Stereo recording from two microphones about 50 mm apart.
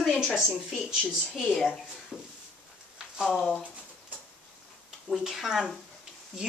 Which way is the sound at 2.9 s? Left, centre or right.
Centre.